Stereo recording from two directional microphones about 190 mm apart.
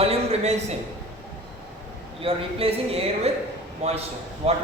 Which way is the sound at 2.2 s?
30° right (ahead or behind).